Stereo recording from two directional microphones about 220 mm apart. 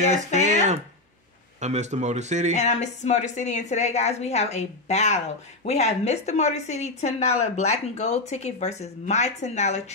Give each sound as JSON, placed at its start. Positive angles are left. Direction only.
{"t": 0.4, "sound": "a sound", "side_deg": -30}
{"t": 1.6, "sound": "a man's voice", "side_deg": -30}
{"t": 2.5, "sound": "a woman's voice", "side_deg": 30}